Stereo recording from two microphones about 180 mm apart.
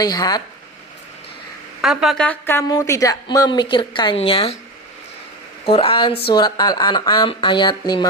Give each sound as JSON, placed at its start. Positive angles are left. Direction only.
{"t": 0.0, "sound": "a woman's voice", "side_deg": 20}
{"t": 1.8, "sound": "a woman's voice", "side_deg": 0}
{"t": 5.6, "sound": "a woman's voice", "side_deg": 30}